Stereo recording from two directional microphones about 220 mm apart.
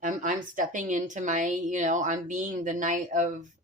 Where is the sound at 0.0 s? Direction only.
35° right (ahead or behind).